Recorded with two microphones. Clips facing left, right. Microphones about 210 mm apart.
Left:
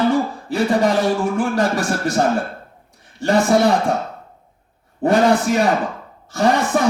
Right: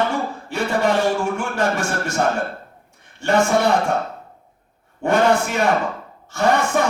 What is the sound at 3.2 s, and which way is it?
Speech, 35° left (ahead or behind).